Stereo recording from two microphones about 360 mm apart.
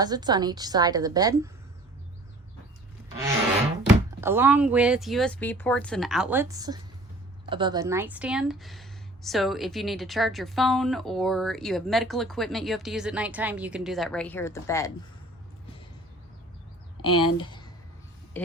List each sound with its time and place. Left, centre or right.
0.0 s a woman's voice: centre
4.2 s speech: centre
17.0 s speech: centre